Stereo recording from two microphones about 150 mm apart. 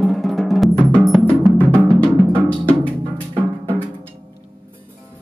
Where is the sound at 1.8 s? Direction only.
35° right (ahead or behind).